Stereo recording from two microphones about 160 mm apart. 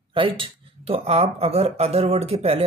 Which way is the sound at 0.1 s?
35° right (ahead or behind).